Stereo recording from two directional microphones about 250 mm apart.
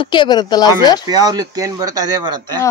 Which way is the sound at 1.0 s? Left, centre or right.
Centre.